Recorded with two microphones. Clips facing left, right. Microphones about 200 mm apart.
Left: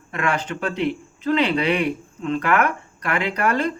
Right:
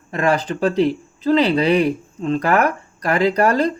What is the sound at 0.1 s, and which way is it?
Speech, 35° right (ahead or behind).